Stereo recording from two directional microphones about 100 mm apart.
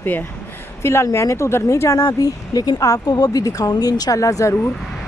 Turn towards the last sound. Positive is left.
turn(degrees=35)  # may be behind; listen again after turning